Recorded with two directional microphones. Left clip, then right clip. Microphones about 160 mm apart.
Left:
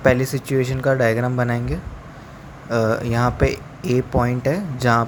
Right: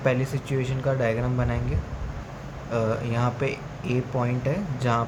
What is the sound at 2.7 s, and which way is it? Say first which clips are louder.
Speech: left 7 dB; 45° left (ahead or behind).